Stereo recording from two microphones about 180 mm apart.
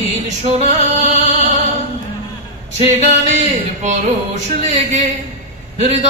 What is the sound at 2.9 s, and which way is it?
Music, 35° right (ahead or behind).